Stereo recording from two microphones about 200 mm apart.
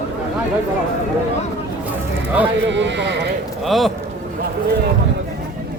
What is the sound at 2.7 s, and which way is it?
Speech, 60° right (ahead or behind).